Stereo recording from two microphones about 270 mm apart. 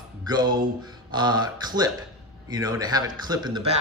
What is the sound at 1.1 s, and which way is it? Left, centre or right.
Speech, centre.